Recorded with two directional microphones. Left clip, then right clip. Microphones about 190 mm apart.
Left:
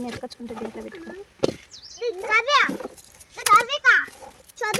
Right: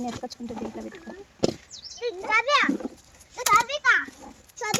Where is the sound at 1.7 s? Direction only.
55° left (ahead or behind).